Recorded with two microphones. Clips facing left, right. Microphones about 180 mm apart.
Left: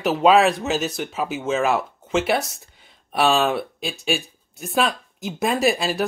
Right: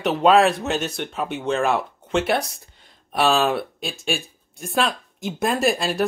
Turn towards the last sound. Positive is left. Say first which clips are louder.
# even
turn(degrees=0)  # may be behind; listen again after turning